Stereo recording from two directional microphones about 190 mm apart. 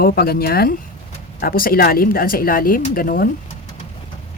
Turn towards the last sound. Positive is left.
turn(degrees=50)  # may be behind; listen again after turning